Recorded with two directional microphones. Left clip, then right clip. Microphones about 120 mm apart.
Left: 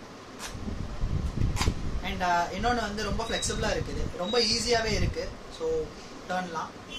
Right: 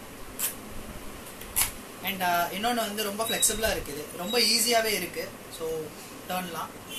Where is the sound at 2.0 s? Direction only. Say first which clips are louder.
Even; 20° left (ahead or behind).